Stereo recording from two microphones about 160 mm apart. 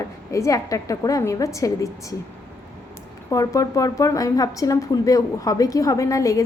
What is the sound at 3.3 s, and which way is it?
A woman's voice, 20° left (ahead or behind).